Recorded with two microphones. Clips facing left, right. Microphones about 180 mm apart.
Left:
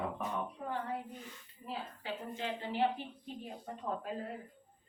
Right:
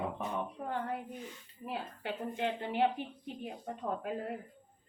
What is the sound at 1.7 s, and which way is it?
Speech, 60° right (ahead or behind).